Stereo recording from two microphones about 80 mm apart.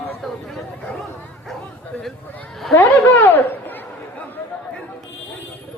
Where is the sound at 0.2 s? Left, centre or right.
Centre.